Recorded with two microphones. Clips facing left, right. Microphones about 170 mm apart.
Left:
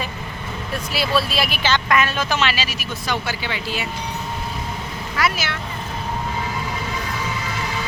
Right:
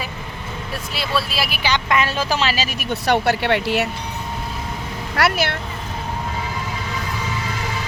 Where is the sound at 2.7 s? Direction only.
65° right (ahead or behind).